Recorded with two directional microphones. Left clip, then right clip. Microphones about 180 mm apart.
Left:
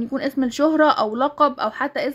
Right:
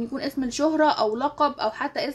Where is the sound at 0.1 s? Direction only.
50° left (ahead or behind).